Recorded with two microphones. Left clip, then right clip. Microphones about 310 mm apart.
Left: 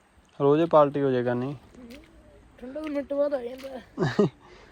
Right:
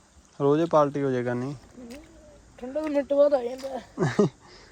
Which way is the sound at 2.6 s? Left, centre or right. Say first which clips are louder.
Right 5 dB; centre.